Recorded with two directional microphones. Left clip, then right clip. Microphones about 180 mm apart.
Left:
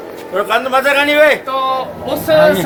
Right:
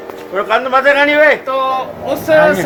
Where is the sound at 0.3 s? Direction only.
30° right (ahead or behind).